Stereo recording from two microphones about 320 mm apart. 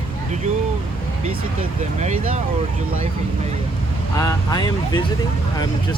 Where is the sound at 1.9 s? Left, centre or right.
Right.